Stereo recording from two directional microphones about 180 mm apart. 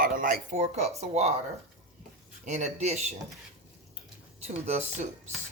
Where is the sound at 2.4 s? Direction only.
40° right (ahead or behind).